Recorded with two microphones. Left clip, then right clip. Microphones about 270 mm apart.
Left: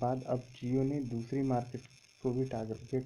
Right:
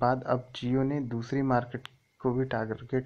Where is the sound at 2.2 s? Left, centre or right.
Right.